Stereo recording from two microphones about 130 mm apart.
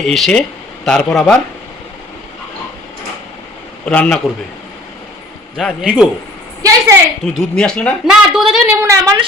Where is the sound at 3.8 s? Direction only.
10° left (ahead or behind).